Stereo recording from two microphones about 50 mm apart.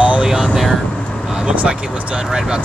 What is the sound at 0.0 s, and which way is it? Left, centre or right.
Vehicle, right.